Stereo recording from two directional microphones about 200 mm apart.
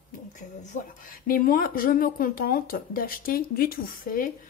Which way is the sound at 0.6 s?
40° left (ahead or behind).